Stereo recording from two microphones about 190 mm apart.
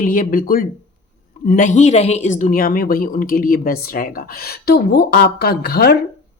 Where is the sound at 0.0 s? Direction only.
45° left (ahead or behind).